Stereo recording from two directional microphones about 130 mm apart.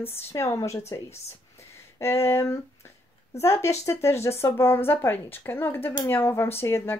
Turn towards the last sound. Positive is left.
turn(degrees=20)  # may be behind; listen again after turning